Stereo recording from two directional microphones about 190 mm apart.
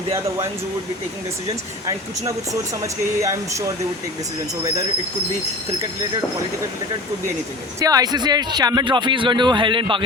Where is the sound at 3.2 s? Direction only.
15° right (ahead or behind).